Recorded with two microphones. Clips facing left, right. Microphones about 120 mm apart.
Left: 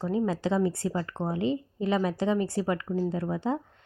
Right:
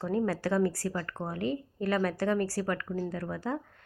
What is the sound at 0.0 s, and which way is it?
A woman's voice, 15° left (ahead or behind).